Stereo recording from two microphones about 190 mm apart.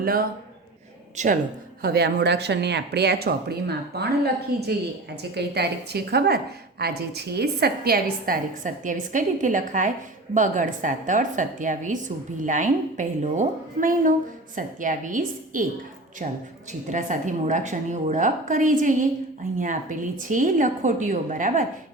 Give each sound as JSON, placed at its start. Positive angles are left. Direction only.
{"t": 0.0, "sound": "a man's voice", "side_deg": -50}
{"t": 1.1, "sound": "speech", "side_deg": -40}
{"t": 1.8, "sound": "a woman's voice", "side_deg": -55}